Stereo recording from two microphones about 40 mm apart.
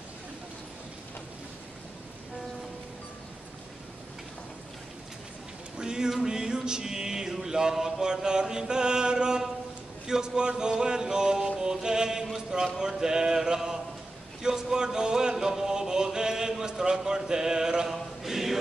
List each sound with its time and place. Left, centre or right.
5.8 s a sound: centre
6.1 s music: centre
7.3 s chant: centre
10.0 s music: centre
18.2 s mantra: centre